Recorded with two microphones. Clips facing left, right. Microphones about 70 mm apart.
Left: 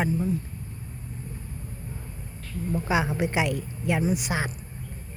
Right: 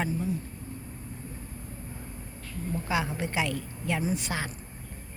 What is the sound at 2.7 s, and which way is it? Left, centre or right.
A woman's voice, left.